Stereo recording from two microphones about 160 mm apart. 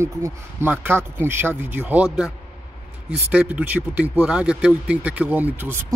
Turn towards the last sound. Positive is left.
turn(degrees=-15)  # may be behind; listen again after turning